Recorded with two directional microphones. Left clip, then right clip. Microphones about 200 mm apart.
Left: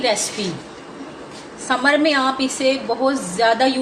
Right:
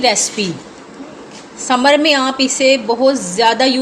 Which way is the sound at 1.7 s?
50° right (ahead or behind).